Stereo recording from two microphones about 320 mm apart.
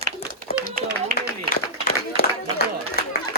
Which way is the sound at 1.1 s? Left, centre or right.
Right.